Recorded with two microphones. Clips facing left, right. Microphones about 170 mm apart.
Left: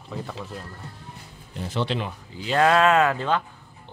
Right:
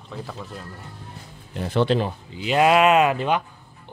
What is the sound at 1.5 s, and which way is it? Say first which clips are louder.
Speech: right 6 dB; 60° right (ahead or behind).